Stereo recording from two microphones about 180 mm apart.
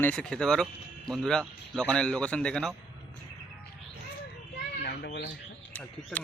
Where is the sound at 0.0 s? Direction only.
5° left (ahead or behind).